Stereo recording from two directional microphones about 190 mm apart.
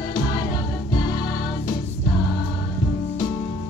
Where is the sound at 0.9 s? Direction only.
20° left (ahead or behind).